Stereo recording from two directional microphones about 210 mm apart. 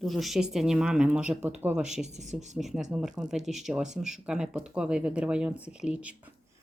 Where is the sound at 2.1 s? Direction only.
35° right (ahead or behind).